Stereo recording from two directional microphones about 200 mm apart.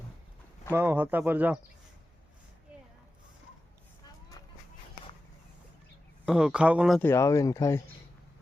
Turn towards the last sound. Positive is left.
turn(degrees=15)  # may be behind; listen again after turning